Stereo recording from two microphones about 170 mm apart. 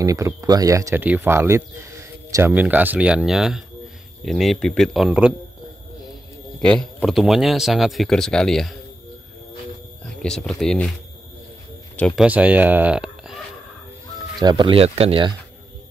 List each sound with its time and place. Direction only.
0.0 s speech: 20° right (ahead or behind)
6.6 s speech: 5° left (ahead or behind)
10.0 s a sound: 5° left (ahead or behind)
10.6 s speech: 5° left (ahead or behind)
12.2 s speech: 10° right (ahead or behind)
14.4 s speech: 25° right (ahead or behind)